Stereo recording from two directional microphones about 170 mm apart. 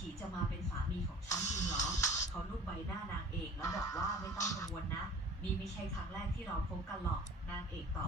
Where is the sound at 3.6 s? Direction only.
20° left (ahead or behind).